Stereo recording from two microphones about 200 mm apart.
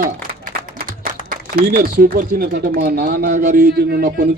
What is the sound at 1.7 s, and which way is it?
Speech, 50° right (ahead or behind).